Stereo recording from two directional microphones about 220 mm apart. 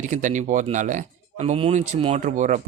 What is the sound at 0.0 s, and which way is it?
A man's voice, 35° right (ahead or behind).